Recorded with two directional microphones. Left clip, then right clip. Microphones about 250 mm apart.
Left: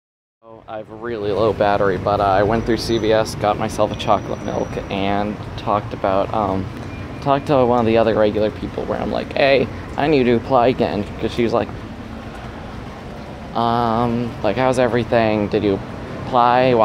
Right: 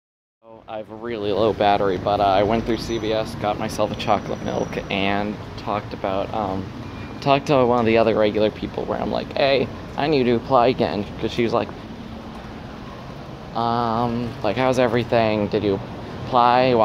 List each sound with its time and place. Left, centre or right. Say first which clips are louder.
1.0 s speech: left 2 dB; centre
2.9 s speech: left 8 dB; left
3.4 s speech: left 4 dB; centre
7.2 s speech: left 1 dB; centre
8.9 s speech: left 3 dB; centre
13.6 s speech: left 3 dB; centre